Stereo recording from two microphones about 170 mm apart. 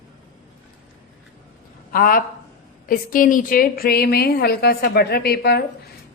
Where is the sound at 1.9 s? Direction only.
60° left (ahead or behind).